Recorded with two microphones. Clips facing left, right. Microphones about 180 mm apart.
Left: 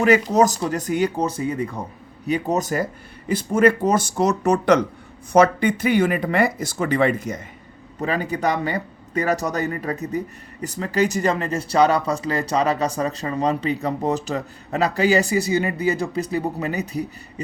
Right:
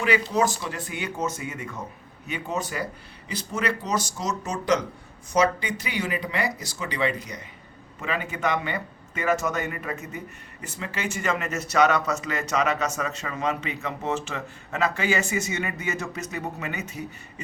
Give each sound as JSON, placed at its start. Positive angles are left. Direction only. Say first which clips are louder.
{"t": 0.0, "sound": "speech", "louder": "left 7 dB", "side_deg": 45}
{"t": 7.9, "sound": "speech", "louder": "left 7 dB", "side_deg": 40}